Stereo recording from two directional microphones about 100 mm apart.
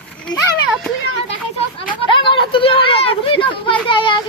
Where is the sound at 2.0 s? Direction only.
55° left (ahead or behind).